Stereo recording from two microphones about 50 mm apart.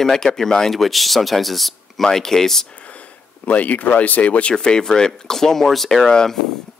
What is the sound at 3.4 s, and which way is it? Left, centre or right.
Speech, left.